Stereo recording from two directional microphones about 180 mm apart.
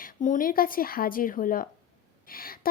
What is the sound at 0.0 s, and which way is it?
A woman's voice, 50° left (ahead or behind).